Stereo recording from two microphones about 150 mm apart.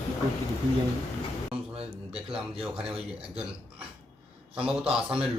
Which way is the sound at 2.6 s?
5° right (ahead or behind).